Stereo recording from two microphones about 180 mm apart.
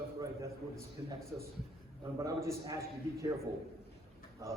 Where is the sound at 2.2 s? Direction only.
20° right (ahead or behind).